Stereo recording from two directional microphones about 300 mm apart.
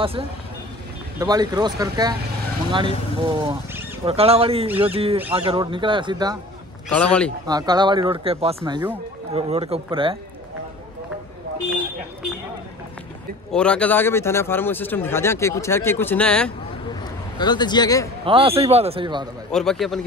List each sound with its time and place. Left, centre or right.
1.2 s speech: centre
6.9 s speech: centre
7.4 s speech: centre
13.5 s a man's voice: centre
17.4 s a man's voice: centre
18.2 s speech: centre
19.5 s speech: centre